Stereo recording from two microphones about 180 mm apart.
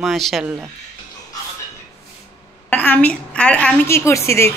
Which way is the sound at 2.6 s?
10° left (ahead or behind).